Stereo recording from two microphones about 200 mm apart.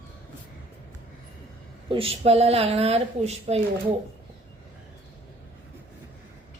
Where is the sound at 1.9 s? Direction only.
25° right (ahead or behind).